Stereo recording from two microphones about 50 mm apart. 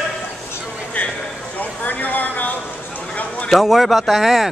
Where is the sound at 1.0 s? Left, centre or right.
Left.